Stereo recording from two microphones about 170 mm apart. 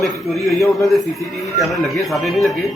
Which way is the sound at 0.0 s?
Centre (ahead or behind).